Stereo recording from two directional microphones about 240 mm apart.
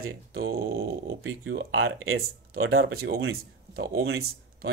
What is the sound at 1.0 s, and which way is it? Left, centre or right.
Speech, right.